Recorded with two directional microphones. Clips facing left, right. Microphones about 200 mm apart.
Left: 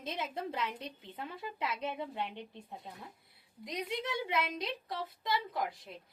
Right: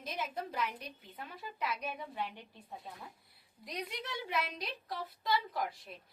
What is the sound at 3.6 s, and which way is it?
A woman's voice, 25° left (ahead or behind).